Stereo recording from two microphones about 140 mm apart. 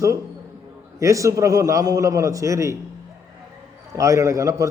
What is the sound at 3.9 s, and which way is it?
Speech, 20° right (ahead or behind).